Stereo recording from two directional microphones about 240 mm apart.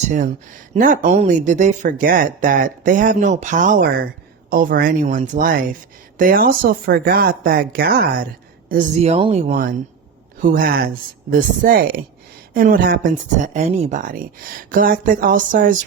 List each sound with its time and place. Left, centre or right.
0.0 s speech: right